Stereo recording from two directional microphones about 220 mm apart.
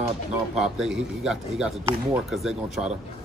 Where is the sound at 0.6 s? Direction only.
Centre (ahead or behind).